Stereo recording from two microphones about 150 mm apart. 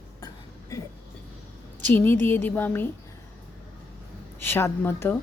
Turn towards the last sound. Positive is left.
turn(degrees=15)  # may be behind; listen again after turning